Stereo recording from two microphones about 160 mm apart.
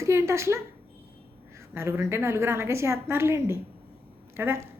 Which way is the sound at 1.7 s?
15° right (ahead or behind).